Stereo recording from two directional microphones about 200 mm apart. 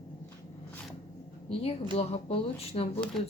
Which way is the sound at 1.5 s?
30° left (ahead or behind).